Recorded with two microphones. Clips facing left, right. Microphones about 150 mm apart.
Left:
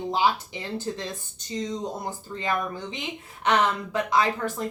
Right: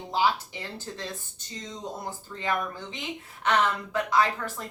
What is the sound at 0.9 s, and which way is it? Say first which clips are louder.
Speech: left 10 dB; 20° left (ahead or behind).